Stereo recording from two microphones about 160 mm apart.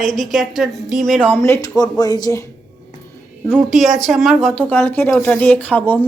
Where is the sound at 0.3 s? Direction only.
Centre (ahead or behind).